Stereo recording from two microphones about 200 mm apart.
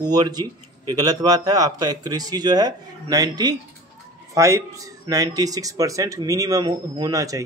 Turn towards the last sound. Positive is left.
turn(degrees=-15)  # may be behind; listen again after turning